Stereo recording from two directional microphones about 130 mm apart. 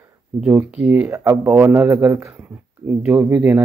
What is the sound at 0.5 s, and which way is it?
Speech, 15° right (ahead or behind).